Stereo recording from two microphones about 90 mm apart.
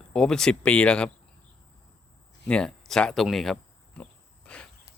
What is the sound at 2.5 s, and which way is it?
Speech, 10° left (ahead or behind).